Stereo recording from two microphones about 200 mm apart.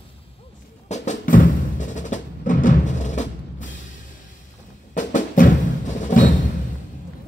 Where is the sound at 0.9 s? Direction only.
35° left (ahead or behind).